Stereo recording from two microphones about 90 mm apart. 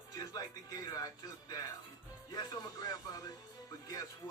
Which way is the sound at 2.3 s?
50° left (ahead or behind).